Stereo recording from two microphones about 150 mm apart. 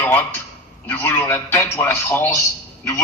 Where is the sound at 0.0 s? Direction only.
10° left (ahead or behind).